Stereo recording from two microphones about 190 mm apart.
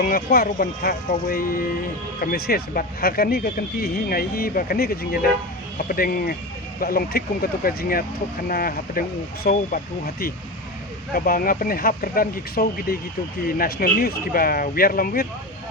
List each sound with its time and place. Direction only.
0.0 s speech: 50° left (ahead or behind)